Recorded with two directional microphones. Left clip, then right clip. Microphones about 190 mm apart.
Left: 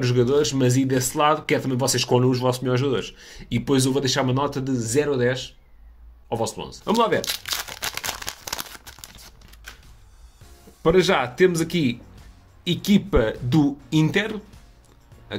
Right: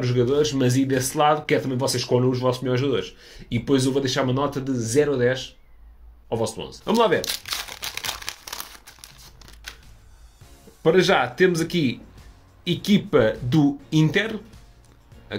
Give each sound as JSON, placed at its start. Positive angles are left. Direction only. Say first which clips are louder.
{"t": 0.0, "sound": "speech", "louder": "left 1 dB", "side_deg": 15}
{"t": 7.2, "sound": "crumpling", "louder": "left 1 dB", "side_deg": 20}
{"t": 10.8, "sound": "speech", "louder": "right 1 dB", "side_deg": 5}